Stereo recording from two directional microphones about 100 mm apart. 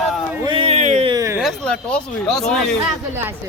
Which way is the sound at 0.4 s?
60° right (ahead or behind).